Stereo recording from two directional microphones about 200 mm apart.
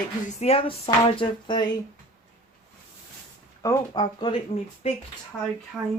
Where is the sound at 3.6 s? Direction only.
15° left (ahead or behind).